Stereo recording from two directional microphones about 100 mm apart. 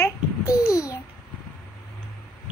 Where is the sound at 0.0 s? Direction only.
35° left (ahead or behind).